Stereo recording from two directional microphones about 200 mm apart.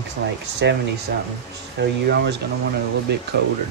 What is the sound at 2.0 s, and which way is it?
Speech, 55° right (ahead or behind).